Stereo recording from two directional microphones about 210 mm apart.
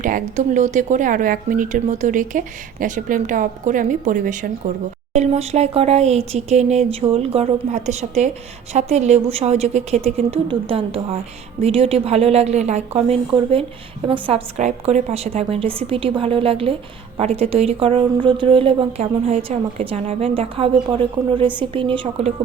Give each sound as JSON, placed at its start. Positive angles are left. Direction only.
{"t": 0.0, "sound": "a woman's voice", "side_deg": -35}